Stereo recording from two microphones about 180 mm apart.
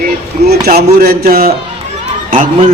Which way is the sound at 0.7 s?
55° right (ahead or behind).